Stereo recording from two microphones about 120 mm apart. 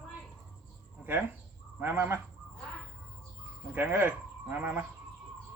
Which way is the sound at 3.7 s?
15° right (ahead or behind).